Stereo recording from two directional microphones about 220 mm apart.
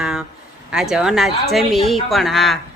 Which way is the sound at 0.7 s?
Centre (ahead or behind).